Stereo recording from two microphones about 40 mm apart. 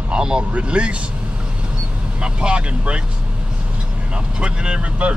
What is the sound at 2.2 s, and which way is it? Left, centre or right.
Speech, right.